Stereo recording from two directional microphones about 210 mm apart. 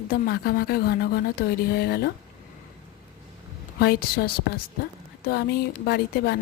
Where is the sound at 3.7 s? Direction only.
50° left (ahead or behind).